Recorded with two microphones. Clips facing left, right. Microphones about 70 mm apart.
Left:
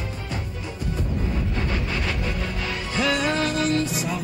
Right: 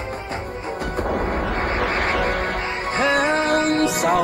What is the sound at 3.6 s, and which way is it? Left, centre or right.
Music, right.